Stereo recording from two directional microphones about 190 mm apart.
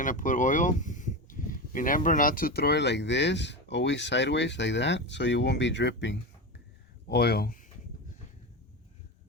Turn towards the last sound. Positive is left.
turn(degrees=45)  # may be behind; listen again after turning